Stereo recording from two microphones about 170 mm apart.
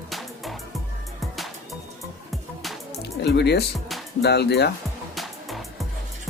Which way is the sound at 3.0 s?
80° left.